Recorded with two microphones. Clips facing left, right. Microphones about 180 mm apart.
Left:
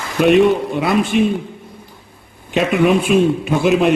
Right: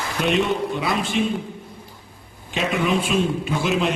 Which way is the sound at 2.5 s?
60° left (ahead or behind).